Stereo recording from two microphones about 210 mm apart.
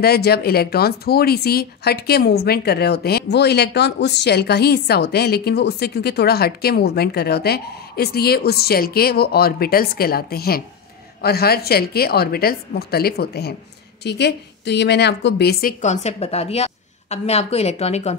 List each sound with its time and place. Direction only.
0.0 s speech: 50° left (ahead or behind)
15.8 s a woman's voice: 35° left (ahead or behind)